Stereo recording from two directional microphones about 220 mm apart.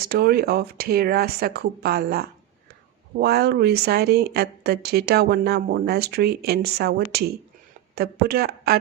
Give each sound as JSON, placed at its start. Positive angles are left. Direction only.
{"t": 0.0, "sound": "speech", "side_deg": -45}